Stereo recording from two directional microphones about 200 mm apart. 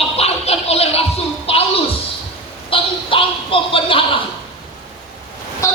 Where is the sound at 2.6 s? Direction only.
25° left (ahead or behind).